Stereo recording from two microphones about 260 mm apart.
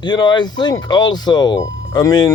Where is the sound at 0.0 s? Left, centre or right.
Centre.